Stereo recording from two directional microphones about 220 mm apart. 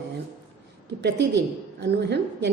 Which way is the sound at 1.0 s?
50° right (ahead or behind).